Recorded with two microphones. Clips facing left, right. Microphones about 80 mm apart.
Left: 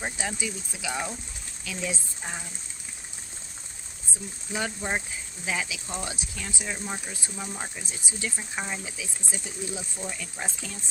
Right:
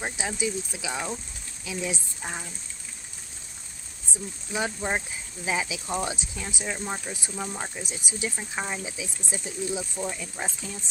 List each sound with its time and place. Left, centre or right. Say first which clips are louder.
0.0 s speech: right 2 dB; centre
4.5 s speech: right 2 dB; centre
5.5 s speech: right 3 dB; right